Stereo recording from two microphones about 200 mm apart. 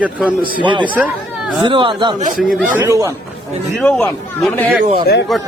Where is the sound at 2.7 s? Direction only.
15° right (ahead or behind).